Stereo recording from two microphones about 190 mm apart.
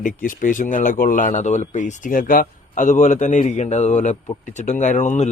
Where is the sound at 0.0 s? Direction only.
45° left (ahead or behind).